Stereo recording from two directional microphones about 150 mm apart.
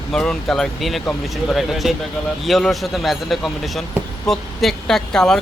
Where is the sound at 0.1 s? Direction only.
5° left (ahead or behind).